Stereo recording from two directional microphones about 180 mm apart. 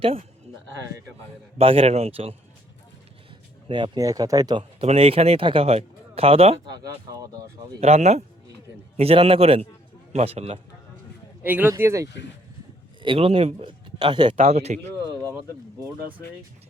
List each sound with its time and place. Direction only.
0.0 s speech: 30° right (ahead or behind)
1.5 s speech: 30° right (ahead or behind)
3.7 s speech: 25° right (ahead or behind)
7.8 s speech: 35° right (ahead or behind)
11.4 s speech: 10° right (ahead or behind)
13.0 s speech: 30° right (ahead or behind)
14.4 s speech: 35° right (ahead or behind)